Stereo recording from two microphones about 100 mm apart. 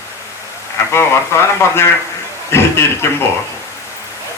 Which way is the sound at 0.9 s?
25° left (ahead or behind).